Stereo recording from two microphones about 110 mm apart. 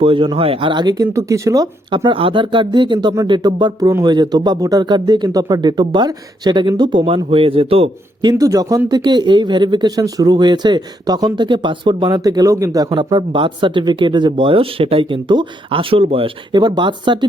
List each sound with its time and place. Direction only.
0.0 s speech: 50° right (ahead or behind)
1.1 s speech: 30° right (ahead or behind)
2.0 s speech: 50° right (ahead or behind)
8.2 s speech: 35° right (ahead or behind); by 16.6 s 55° right (ahead or behind)
16.6 s speech: 45° right (ahead or behind)